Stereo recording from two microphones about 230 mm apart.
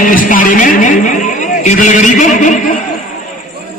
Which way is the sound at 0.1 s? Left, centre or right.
Left.